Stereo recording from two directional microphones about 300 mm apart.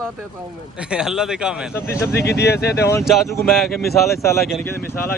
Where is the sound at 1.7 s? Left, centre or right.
Centre.